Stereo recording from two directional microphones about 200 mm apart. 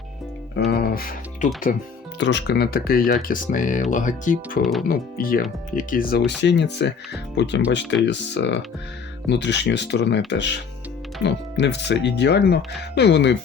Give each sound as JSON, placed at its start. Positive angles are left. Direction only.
{"t": 0.7, "sound": "speech", "side_deg": 50}
{"t": 2.1, "sound": "speech", "side_deg": 60}
{"t": 4.6, "sound": "speech", "side_deg": 0}
{"t": 4.9, "sound": "speech", "side_deg": 45}